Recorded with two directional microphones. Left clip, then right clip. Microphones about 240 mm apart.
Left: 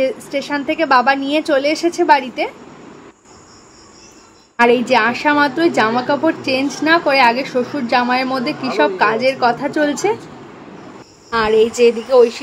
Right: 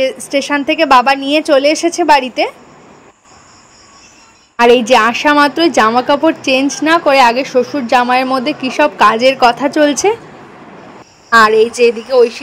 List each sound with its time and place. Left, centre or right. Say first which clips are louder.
0.0 s a woman's voice: right 4 dB; right
4.6 s a woman's voice: right 5 dB; right
11.2 s a woman's voice: right 6 dB; right